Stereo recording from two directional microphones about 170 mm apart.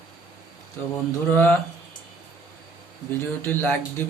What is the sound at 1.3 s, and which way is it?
Speech, 10° left (ahead or behind).